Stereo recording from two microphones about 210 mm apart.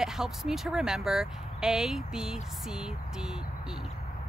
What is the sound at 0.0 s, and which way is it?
Speech, centre (ahead or behind).